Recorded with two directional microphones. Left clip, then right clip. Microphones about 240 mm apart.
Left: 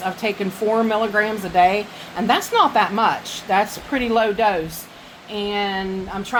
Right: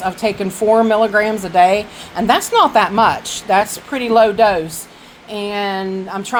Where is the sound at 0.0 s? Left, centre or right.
Right.